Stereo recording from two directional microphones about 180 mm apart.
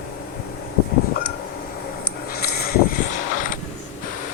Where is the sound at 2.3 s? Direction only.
60° left (ahead or behind).